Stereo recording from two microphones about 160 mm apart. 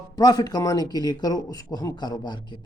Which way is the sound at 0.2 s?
25° left (ahead or behind).